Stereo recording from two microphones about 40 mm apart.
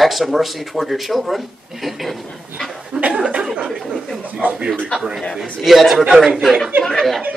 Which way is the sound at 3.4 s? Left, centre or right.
Centre.